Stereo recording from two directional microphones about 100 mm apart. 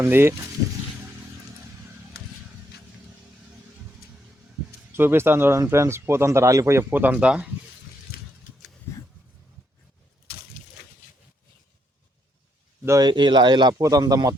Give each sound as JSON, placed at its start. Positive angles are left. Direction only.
{"t": 0.0, "sound": "speech", "side_deg": -25}
{"t": 4.9, "sound": "speech", "side_deg": -20}
{"t": 13.0, "sound": "speech", "side_deg": -50}